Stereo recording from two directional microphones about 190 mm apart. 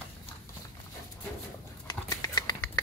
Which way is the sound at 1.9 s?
20° left (ahead or behind).